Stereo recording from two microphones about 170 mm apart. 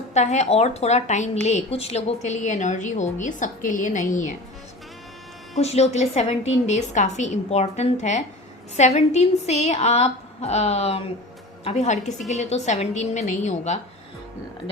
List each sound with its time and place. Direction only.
0.1 s a woman's voice: 40° left (ahead or behind)
5.5 s a woman's voice: 40° left (ahead or behind)